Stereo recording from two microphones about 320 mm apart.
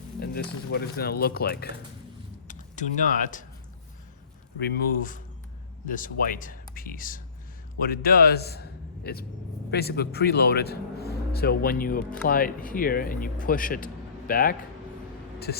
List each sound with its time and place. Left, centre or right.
0.2 s speech: left
4.5 s speech: left